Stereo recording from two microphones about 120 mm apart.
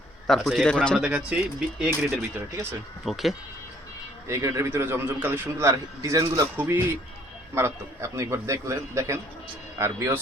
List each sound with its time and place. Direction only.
0.3 s a man's voice: centre (ahead or behind)
0.9 s speech: 10° right (ahead or behind)
2.1 s a man's voice: 20° right (ahead or behind)
3.0 s a man's voice: centre (ahead or behind)
4.3 s a man's voice: 25° right (ahead or behind)